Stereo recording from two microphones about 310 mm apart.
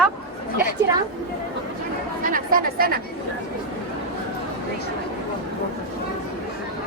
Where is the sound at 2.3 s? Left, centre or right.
Right.